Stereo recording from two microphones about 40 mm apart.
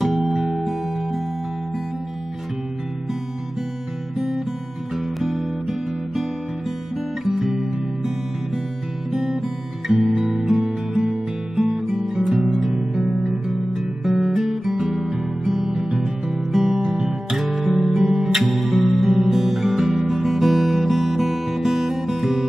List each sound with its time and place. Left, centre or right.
0.0 s music: centre
0.4 s music: centre
5.2 s music: centre
7.2 s music: centre
9.8 s music: centre
13.5 s guitar: centre
15.6 s music: centre